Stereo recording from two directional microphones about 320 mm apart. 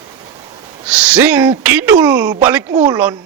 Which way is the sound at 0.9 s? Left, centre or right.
Centre.